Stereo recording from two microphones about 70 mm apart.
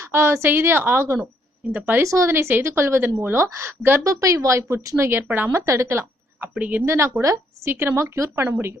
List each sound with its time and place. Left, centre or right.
0.0 s a woman's voice: right
1.6 s a woman's voice: right
2.0 s speech: right
2.3 s a woman's voice: right
4.0 s speech: right
5.0 s a woman's voice: right
5.5 s a woman's voice: right
6.5 s a woman's voice: right
6.8 s a woman's voice: right
7.7 s a woman's voice: right